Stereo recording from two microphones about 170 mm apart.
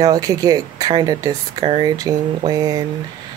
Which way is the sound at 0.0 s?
20° right (ahead or behind).